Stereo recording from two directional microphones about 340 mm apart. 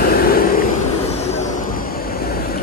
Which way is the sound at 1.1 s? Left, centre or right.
Centre.